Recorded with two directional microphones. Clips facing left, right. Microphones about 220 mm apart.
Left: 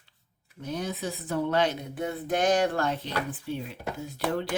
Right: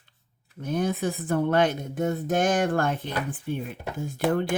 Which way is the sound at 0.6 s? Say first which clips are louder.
Right 6 dB; 50° right (ahead or behind).